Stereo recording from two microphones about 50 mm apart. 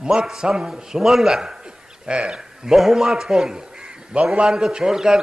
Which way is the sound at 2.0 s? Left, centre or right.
Centre.